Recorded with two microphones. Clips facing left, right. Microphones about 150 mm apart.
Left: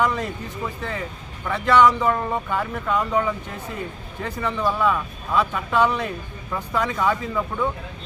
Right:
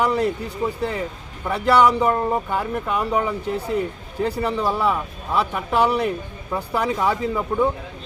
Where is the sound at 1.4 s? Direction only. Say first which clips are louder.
Even; 30° right (ahead or behind).